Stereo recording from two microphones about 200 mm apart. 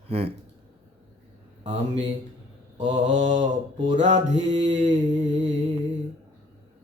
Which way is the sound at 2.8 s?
35° right (ahead or behind).